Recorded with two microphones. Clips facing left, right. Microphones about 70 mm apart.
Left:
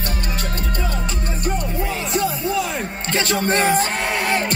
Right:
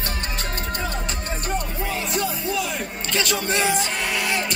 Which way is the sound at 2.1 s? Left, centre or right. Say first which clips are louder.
Left 6 dB; left.